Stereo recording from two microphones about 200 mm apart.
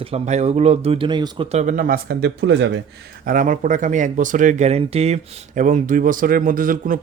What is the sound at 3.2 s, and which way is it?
Speech, 40° right (ahead or behind).